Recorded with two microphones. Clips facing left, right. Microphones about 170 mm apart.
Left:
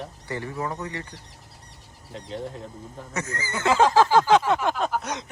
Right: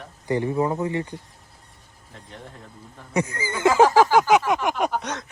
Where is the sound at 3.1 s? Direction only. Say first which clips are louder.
Right 6 dB; 15° right (ahead or behind).